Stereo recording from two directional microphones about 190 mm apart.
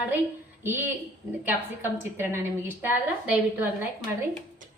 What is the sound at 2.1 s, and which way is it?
A woman's voice, 10° right (ahead or behind).